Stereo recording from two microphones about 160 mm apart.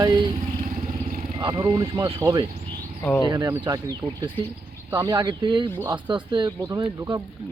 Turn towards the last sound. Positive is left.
turn(degrees=-25)  # may be behind; listen again after turning